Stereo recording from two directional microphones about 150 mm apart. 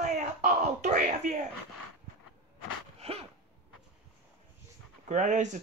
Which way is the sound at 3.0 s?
45° right (ahead or behind).